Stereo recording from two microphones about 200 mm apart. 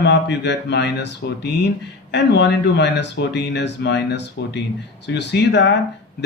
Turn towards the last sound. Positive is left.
turn(degrees=60)  # may be behind; listen again after turning